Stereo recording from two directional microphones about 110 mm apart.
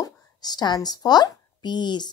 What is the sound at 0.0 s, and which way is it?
A woman's voice, 35° left (ahead or behind).